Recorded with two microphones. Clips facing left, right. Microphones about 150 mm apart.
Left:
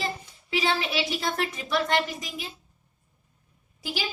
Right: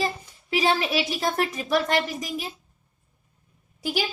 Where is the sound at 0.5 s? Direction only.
45° right (ahead or behind).